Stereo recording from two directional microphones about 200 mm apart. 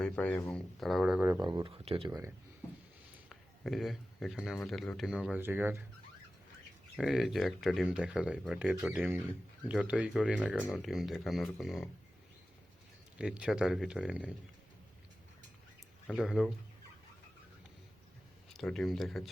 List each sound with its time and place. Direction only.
0.0 s speech: 5° left (ahead or behind)
1.4 s speech: 20° right (ahead or behind)
2.0 s speech: 15° right (ahead or behind)
3.2 s a sound: centre (ahead or behind)
4.5 s speech: centre (ahead or behind)
7.0 s speech: centre (ahead or behind)
13.1 s speech: 5° right (ahead or behind)
16.0 s speech: centre (ahead or behind)
18.5 s speech: centre (ahead or behind)